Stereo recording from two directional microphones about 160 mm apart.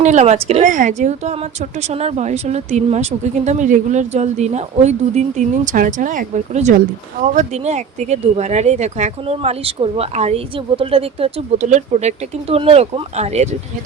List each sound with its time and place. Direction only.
0.0 s speech: 45° right (ahead or behind)